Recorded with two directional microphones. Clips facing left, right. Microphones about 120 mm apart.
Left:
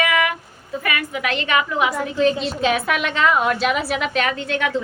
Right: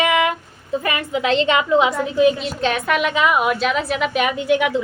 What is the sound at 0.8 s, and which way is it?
A woman's voice, 25° right (ahead or behind).